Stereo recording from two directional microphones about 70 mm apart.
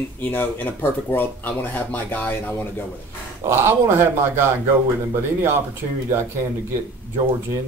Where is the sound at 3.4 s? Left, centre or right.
Right.